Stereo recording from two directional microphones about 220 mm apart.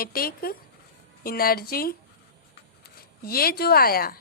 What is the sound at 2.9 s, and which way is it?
A woman's voice, 45° left (ahead or behind).